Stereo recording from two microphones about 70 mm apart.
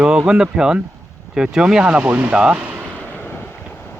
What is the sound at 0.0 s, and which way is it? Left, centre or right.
Speech, centre.